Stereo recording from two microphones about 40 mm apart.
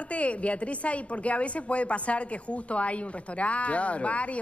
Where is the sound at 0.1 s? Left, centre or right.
Left.